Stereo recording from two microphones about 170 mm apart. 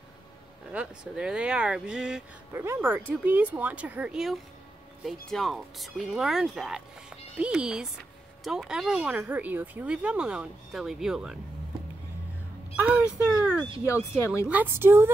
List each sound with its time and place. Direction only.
0.7 s speech: 5° right (ahead or behind)
2.5 s speech: 15° right (ahead or behind)
12.8 s speech: 5° right (ahead or behind)
13.8 s speech: 15° left (ahead or behind)
14.5 s speech: 10° right (ahead or behind)